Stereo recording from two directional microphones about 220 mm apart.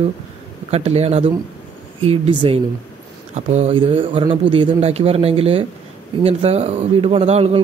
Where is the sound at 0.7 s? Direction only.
30° right (ahead or behind).